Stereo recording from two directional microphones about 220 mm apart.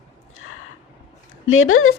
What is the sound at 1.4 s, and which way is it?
Speech, 65° left (ahead or behind).